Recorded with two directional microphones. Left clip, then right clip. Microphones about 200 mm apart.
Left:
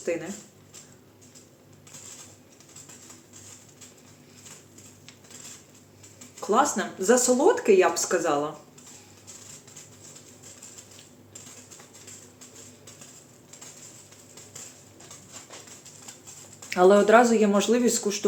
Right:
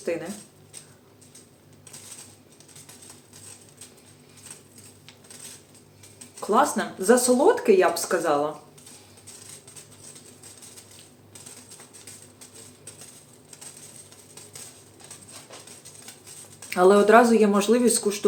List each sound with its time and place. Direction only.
0.0 s speech: 5° right (ahead or behind)
6.4 s speech: 5° right (ahead or behind)
16.6 s speech: 5° left (ahead or behind)